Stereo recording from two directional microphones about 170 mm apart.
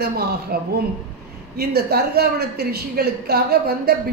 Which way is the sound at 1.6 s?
70° right (ahead or behind).